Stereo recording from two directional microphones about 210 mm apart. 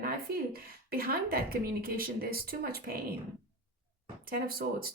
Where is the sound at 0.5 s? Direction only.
45° right (ahead or behind).